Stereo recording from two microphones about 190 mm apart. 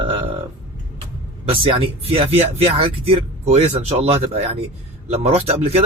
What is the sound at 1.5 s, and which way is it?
Speech, 30° right (ahead or behind).